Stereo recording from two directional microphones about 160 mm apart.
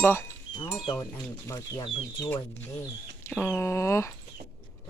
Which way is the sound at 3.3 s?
10° left (ahead or behind).